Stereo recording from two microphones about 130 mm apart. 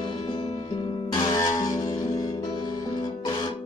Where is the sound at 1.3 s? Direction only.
30° left (ahead or behind).